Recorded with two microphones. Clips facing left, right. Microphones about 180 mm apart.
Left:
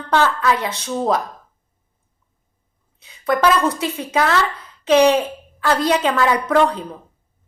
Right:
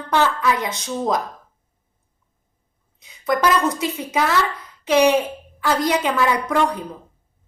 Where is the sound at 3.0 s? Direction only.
15° right (ahead or behind).